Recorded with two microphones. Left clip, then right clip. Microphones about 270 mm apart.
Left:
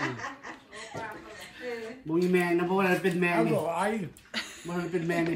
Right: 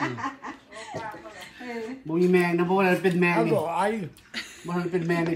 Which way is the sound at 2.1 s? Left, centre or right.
Centre.